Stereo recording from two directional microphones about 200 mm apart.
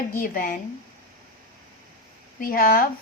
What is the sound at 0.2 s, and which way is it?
Speech, 45° left (ahead or behind).